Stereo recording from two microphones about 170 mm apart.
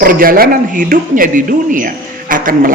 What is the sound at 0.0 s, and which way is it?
A man's voice, 55° right (ahead or behind).